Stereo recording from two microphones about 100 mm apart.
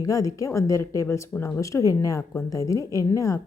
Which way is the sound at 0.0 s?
35° left (ahead or behind).